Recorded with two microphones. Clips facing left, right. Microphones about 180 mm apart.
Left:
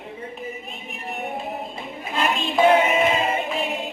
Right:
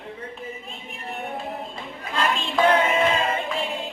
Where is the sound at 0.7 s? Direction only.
15° left (ahead or behind).